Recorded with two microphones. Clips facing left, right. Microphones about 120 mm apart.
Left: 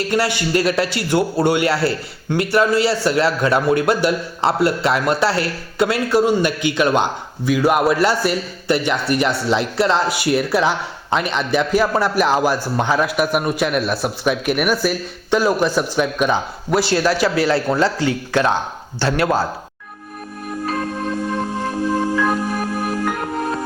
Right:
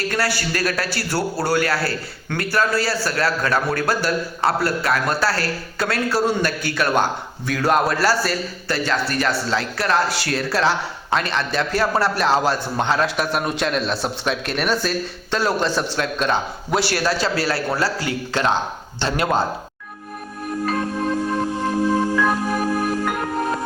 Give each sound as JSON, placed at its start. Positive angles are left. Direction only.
{"t": 0.1, "sound": "a man's voice", "side_deg": 20}
{"t": 19.1, "sound": "speech", "side_deg": 0}